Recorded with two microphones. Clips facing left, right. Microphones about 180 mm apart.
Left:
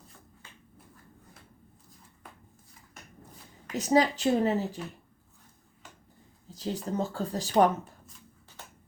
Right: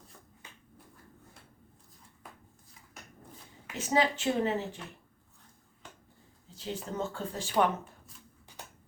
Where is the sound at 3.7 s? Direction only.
40° left (ahead or behind).